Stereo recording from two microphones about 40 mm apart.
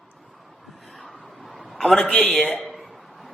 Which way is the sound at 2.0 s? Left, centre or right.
Centre.